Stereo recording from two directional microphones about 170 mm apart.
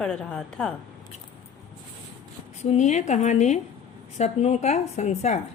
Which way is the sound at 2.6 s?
45° left (ahead or behind).